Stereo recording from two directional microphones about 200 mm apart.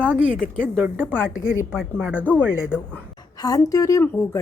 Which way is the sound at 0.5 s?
10° right (ahead or behind).